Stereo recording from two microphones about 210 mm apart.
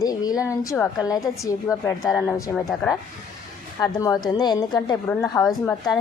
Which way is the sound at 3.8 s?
15° left (ahead or behind).